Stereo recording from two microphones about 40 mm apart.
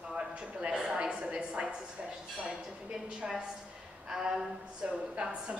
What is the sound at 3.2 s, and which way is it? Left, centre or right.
A woman's voice, right.